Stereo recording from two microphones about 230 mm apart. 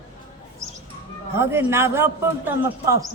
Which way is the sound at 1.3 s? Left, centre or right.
Centre.